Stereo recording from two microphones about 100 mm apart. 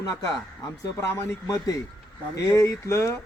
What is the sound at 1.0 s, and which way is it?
Speech, 25° left (ahead or behind).